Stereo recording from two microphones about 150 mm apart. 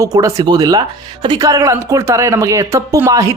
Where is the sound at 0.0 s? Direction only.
20° right (ahead or behind).